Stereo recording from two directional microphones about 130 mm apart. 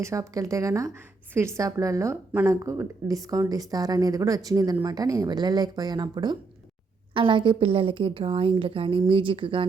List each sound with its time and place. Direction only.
0.0 s a woman's voice: 25° right (ahead or behind); by 9.6 s 40° right (ahead or behind)